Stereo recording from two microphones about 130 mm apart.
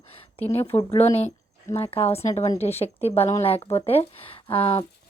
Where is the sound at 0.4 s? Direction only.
50° left (ahead or behind).